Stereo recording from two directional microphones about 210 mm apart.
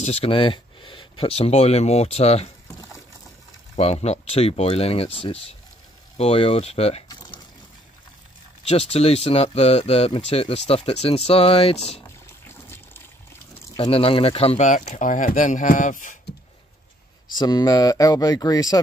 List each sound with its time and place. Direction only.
0.0 s speech: 30° left (ahead or behind)
3.7 s speech: 30° left (ahead or behind)
8.6 s speech: 30° left (ahead or behind)
12.4 s water: 10° left (ahead or behind)
13.7 s speech: 25° left (ahead or behind)
17.4 s speech: 20° left (ahead or behind)